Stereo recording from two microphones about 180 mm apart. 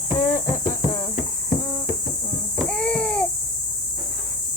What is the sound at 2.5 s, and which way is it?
Baby cry, 5° left (ahead or behind).